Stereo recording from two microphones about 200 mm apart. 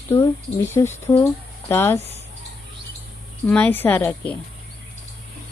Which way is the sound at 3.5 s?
10° left (ahead or behind).